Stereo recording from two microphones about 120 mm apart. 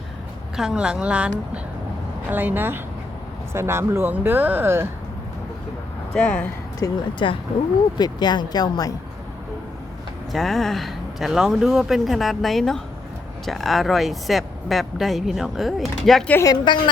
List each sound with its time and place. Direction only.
0.5 s a woman's voice: 5° right (ahead or behind)
2.3 s a woman's voice: 15° right (ahead or behind)
6.1 s speech: 10° left (ahead or behind)
6.7 s speech: 30° left (ahead or behind)
10.3 s speech: centre (ahead or behind)
16.3 s a woman's voice: 25° left (ahead or behind)